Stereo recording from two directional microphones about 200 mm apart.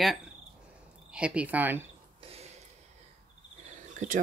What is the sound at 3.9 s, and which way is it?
Insect, 40° right (ahead or behind).